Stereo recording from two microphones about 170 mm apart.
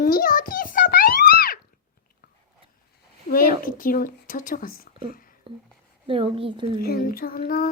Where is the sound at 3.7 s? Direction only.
55° left (ahead or behind).